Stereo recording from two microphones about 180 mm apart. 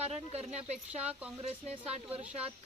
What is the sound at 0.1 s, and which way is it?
Speech, 35° right (ahead or behind).